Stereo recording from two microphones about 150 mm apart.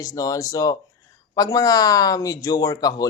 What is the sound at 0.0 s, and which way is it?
Speech, 25° left (ahead or behind).